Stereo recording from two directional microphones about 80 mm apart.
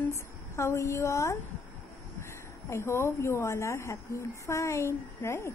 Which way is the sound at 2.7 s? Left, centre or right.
Left.